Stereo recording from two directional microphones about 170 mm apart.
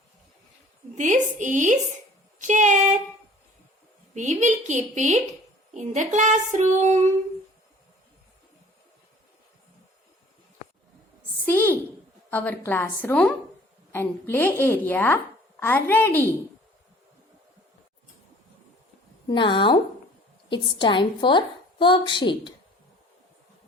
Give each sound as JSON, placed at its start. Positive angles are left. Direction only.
{"t": 0.9, "sound": "a woman's voice", "side_deg": -45}
{"t": 4.1, "sound": "a woman's voice", "side_deg": -45}
{"t": 11.4, "sound": "a woman's voice", "side_deg": 10}
{"t": 19.3, "sound": "a woman's voice", "side_deg": 30}